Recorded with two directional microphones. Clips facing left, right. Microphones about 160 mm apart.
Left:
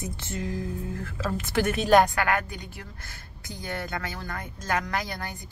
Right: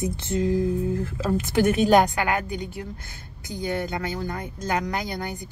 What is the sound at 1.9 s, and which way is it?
Speech, 15° right (ahead or behind).